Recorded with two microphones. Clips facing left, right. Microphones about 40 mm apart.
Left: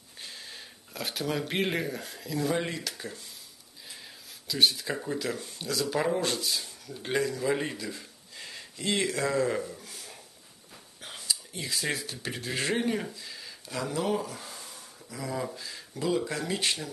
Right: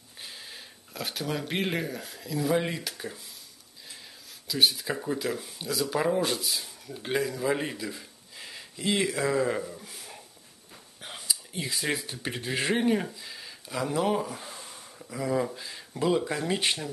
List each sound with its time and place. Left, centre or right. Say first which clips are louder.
0.2 s speech: even; centre
2.6 s speech: right 1 dB; centre
4.5 s speech: right 1 dB; centre
11.0 s a sound: even; centre
12.0 s speech: right 1 dB; centre